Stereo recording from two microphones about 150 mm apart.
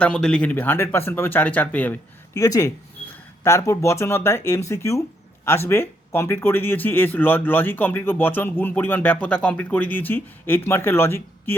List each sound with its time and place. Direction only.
0.0 s speech: 5° left (ahead or behind)